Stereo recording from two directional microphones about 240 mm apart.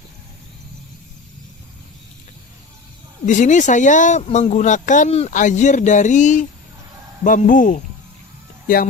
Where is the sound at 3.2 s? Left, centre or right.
Left.